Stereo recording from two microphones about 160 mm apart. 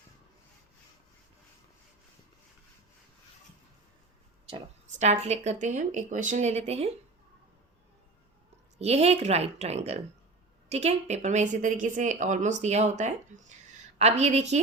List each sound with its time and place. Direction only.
4.9 s speech: 45° right (ahead or behind)
8.8 s a woman's voice: 40° right (ahead or behind)